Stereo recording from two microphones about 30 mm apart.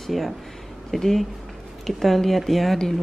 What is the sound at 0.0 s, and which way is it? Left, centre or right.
Speech, centre.